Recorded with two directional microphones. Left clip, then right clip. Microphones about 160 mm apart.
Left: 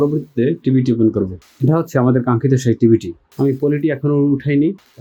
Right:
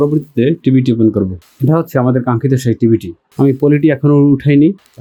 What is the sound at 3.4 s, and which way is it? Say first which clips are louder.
Speech: right 6 dB; 45° right (ahead or behind).